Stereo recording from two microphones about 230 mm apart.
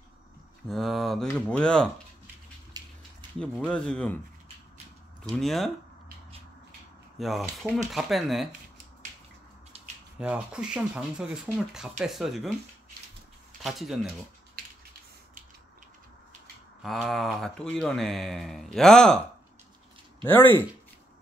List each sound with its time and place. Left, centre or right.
0.7 s speech: centre
2.8 s a sound: centre
3.3 s speech: centre
5.4 s speech: centre
7.2 s speech: centre
10.1 s speech: centre
13.6 s speech: centre
16.8 s speech: centre
20.2 s speech: centre